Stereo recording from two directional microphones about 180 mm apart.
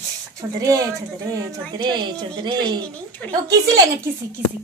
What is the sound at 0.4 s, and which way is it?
Speech, 20° right (ahead or behind).